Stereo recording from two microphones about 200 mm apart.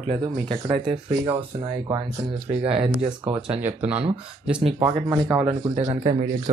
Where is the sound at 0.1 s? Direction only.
25° right (ahead or behind).